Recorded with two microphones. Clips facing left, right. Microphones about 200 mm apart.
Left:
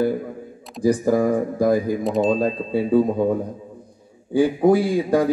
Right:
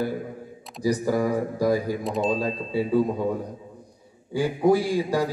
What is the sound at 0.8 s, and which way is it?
A man's voice, 50° left (ahead or behind).